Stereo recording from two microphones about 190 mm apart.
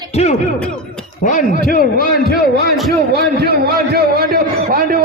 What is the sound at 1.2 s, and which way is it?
Speech, 45° left (ahead or behind).